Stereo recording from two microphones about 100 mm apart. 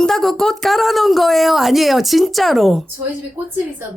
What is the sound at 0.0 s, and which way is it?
A woman's voice, 5° left (ahead or behind).